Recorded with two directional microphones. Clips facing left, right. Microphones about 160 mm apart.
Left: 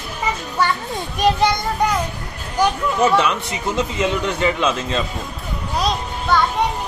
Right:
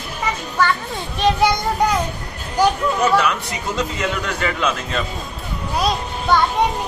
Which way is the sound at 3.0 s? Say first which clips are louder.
Left 3 dB; 25° left (ahead or behind).